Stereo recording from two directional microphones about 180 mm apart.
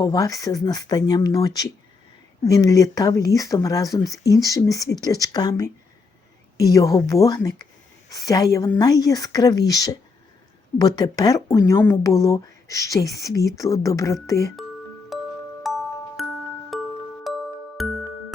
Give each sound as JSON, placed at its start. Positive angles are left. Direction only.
{"t": 0.0, "sound": "speech", "side_deg": 20}
{"t": 15.1, "sound": "glockenspiel", "side_deg": 0}
{"t": 16.2, "sound": "music", "side_deg": 0}